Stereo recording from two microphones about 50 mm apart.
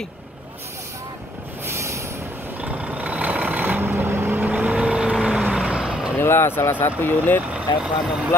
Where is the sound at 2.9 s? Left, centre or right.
Right.